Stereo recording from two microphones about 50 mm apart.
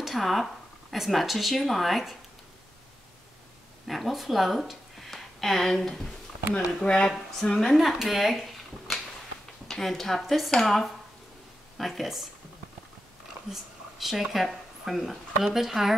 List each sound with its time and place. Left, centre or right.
0.0 s speech: centre
3.8 s speech: centre
6.8 s speech: centre
13.5 s speech: centre